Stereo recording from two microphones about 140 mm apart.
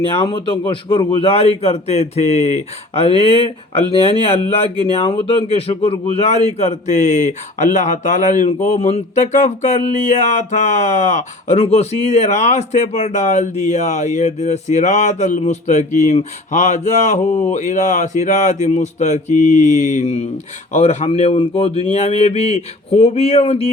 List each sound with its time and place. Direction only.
0.0 s a man's voice: 40° left (ahead or behind)
0.3 s a man's voice: 30° left (ahead or behind); by 8.5 s 60° left (ahead or behind)
8.7 s a man's voice: 50° left (ahead or behind)